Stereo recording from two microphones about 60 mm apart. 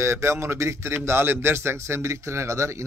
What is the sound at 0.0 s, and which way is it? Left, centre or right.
A man's voice, right.